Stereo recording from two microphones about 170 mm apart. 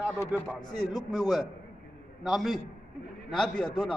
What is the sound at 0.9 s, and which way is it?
Speech, 25° left (ahead or behind).